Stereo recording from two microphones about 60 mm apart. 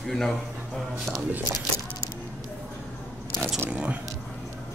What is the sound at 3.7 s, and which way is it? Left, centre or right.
Speech, right.